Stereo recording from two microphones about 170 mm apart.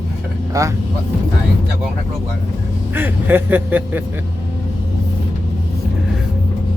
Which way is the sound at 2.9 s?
10° right (ahead or behind).